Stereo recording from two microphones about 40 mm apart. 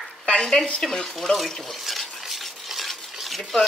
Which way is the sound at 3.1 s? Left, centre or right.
Centre.